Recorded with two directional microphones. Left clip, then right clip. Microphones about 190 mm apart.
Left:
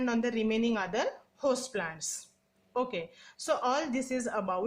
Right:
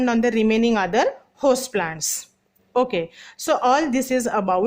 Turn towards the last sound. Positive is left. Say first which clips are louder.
# right 12 dB
turn(degrees=-40)  # may be behind; listen again after turning